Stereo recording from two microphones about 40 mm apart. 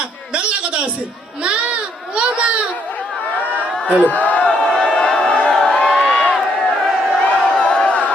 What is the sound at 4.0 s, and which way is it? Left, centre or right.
Speech, left.